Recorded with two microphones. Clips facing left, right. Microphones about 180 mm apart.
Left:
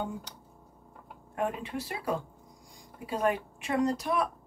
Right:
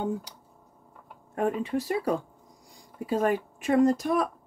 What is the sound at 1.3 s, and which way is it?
Speech, 40° right (ahead or behind).